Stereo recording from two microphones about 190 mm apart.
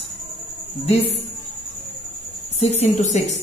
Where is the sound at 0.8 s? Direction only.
30° left (ahead or behind).